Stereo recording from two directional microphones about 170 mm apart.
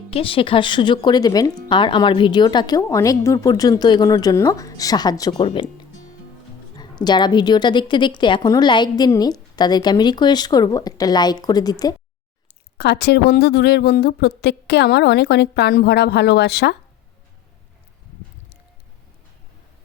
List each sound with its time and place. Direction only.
0.1 s speech: 30° left (ahead or behind)
6.7 s speech: 25° left (ahead or behind)
12.7 s a woman's voice: 75° left (ahead or behind)